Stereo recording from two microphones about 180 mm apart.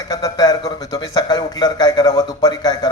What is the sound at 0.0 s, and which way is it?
A man's voice, 20° left (ahead or behind).